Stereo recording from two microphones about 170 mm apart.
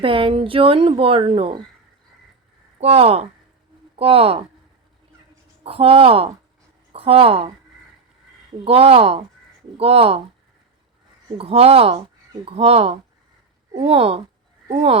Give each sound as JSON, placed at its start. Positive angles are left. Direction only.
{"t": 0.0, "sound": "speech", "side_deg": -30}
{"t": 2.8, "sound": "speech", "side_deg": -35}
{"t": 5.6, "sound": "speech", "side_deg": -35}
{"t": 8.6, "sound": "speech", "side_deg": -35}
{"t": 11.3, "sound": "speech", "side_deg": -35}